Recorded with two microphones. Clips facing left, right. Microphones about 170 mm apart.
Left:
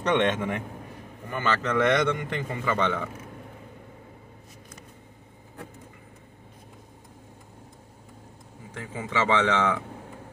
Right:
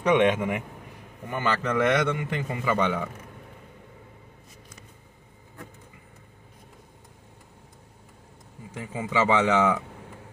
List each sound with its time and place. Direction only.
0.0 s a man's voice: 10° right (ahead or behind)
8.7 s a man's voice: 10° right (ahead or behind)